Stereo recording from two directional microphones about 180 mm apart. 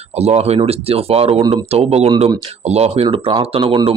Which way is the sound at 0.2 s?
35° right (ahead or behind).